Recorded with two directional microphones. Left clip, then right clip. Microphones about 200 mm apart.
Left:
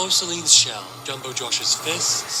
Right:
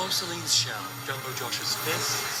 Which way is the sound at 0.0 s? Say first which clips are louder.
Left 7 dB; 25° left (ahead or behind).